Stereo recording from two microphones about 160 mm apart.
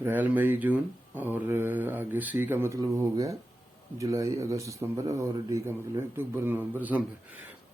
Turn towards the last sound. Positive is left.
turn(degrees=-10)  # may be behind; listen again after turning